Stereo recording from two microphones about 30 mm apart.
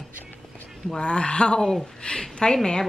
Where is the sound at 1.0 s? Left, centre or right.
Left.